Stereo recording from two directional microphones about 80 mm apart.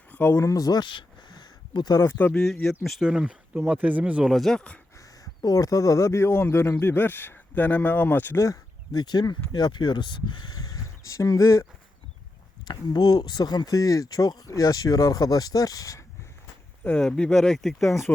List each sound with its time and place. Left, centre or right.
0.1 s a sound: left
0.3 s speech: left
0.8 s a sound: left
2.1 s speech: centre
2.4 s speech: centre
4.3 s speech: centre
5.4 s speech: left
8.4 s a sound: left
9.0 s speech: left
10.5 s a sound: left
12.6 s speech: left
16.8 s speech: centre